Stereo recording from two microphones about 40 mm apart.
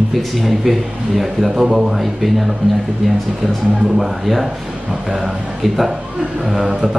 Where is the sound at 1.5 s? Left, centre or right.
Centre.